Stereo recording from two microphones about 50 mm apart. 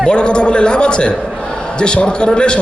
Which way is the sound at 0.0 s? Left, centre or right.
Centre.